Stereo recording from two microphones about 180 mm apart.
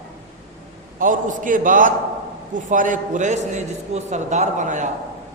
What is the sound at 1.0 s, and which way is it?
A man's voice, 50° right (ahead or behind).